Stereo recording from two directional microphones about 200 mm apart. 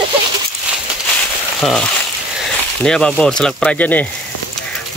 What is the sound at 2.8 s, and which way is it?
Speech, 5° left (ahead or behind).